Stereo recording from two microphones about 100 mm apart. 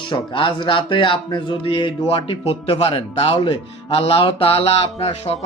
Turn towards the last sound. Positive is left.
turn(degrees=90)